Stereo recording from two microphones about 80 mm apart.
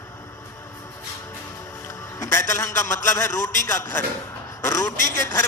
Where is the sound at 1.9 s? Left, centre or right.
Left.